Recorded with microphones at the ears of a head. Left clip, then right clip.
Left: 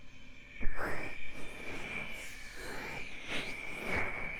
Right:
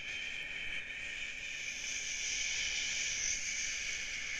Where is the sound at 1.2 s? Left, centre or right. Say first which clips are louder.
Right 6 dB; right.